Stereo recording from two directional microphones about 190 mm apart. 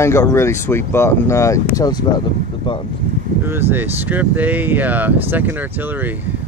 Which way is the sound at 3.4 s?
10° right (ahead or behind).